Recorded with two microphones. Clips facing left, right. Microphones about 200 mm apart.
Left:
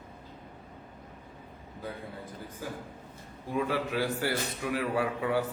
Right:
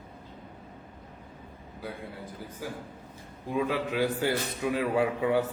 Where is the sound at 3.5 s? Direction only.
15° right (ahead or behind).